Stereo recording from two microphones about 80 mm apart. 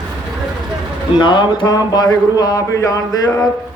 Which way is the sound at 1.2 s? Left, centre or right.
Left.